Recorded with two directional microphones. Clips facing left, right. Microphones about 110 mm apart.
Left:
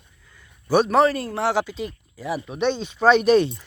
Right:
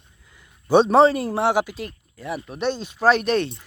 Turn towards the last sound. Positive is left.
turn(degrees=5)  # may be behind; listen again after turning